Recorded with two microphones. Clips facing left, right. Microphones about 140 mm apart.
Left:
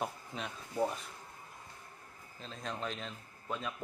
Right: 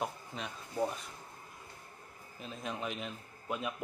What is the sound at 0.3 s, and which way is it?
Speech, centre (ahead or behind).